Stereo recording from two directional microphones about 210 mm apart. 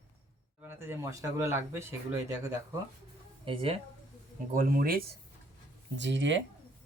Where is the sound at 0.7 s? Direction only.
10° right (ahead or behind).